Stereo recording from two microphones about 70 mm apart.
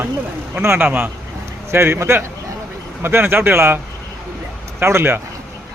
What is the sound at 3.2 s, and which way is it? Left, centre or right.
A man's voice, right.